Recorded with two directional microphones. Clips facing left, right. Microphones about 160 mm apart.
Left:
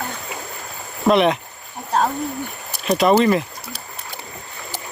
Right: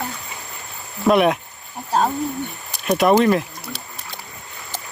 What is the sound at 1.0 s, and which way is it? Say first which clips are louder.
Speech: even; 5° right (ahead or behind).